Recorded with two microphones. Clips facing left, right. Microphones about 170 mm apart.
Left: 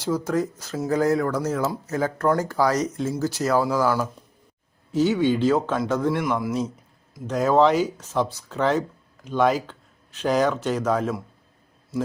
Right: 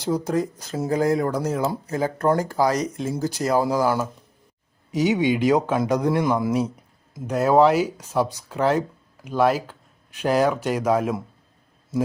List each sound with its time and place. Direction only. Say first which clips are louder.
0.0 s speech: right 1 dB; 15° right (ahead or behind)
4.9 s speech: even; 15° right (ahead or behind)
7.3 s speech: right 2 dB; 10° right (ahead or behind)